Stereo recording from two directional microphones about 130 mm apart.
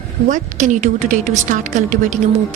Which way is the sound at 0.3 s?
75° right (ahead or behind).